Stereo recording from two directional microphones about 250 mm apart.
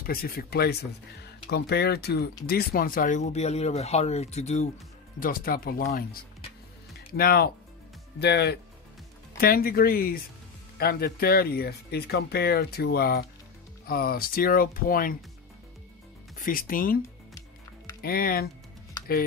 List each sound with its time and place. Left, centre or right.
0.0 s speech: left
7.1 s speech: left
16.3 s speech: left
18.0 s speech: left